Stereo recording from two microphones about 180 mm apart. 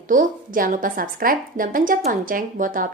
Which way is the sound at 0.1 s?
50° right (ahead or behind).